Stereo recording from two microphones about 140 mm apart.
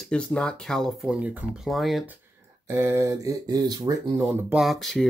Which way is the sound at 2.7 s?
20° right (ahead or behind).